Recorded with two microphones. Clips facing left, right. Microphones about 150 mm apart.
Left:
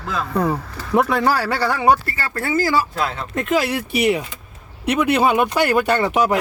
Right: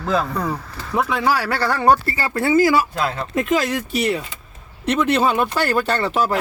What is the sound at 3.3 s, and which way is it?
Speech, 5° left (ahead or behind).